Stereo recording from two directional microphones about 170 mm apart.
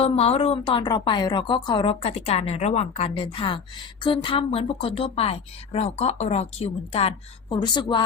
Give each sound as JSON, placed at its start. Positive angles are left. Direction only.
{"t": 0.0, "sound": "a woman's voice", "side_deg": 35}
{"t": 7.5, "sound": "a woman's voice", "side_deg": 25}